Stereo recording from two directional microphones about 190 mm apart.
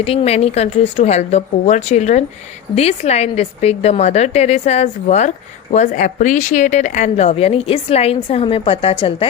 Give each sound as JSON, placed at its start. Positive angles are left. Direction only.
{"t": 0.0, "sound": "speech", "side_deg": 30}